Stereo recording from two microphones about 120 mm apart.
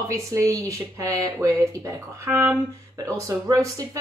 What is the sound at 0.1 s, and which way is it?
Speech, 25° right (ahead or behind).